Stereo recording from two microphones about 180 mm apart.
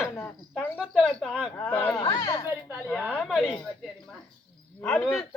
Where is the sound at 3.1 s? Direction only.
5° left (ahead or behind).